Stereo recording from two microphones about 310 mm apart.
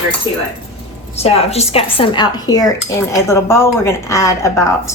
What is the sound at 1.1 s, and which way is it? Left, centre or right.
A woman's voice, centre.